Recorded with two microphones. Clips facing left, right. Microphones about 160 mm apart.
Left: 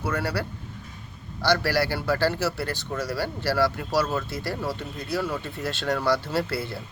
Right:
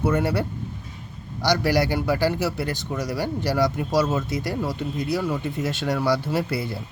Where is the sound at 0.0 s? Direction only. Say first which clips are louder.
Right 6 dB; 20° right (ahead or behind).